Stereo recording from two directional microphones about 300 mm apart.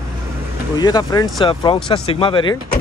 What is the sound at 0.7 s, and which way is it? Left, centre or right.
Speech, centre.